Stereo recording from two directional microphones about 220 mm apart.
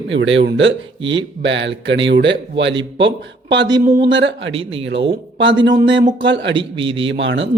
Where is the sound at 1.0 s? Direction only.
20° right (ahead or behind).